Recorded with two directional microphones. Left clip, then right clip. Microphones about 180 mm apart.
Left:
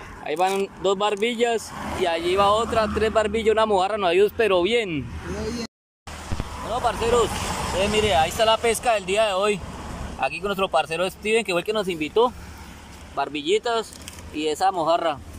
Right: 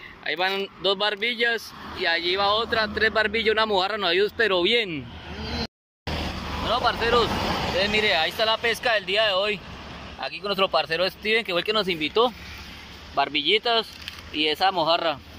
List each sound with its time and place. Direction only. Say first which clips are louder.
0.2 s speech: left 3 dB; 10° left (ahead or behind)
6.7 s speech: even; 15° left (ahead or behind)